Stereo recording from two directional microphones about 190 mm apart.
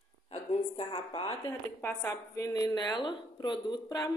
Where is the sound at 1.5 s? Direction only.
10° left (ahead or behind).